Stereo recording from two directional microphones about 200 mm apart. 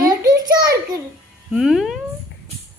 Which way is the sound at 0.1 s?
20° right (ahead or behind).